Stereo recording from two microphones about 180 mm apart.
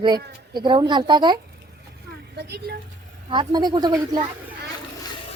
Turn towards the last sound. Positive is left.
turn(degrees=-25)  # may be behind; listen again after turning